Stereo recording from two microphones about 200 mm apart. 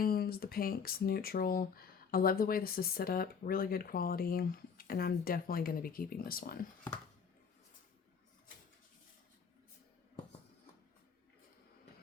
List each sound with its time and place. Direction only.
0.0 s speech: 50° left (ahead or behind)